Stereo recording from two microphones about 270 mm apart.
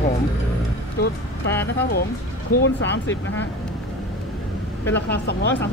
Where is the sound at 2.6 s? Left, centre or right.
Left.